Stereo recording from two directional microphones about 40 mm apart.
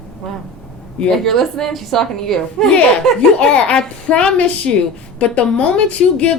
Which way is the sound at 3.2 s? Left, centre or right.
Left.